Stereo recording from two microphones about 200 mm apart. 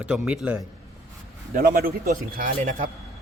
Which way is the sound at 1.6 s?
45° right (ahead or behind).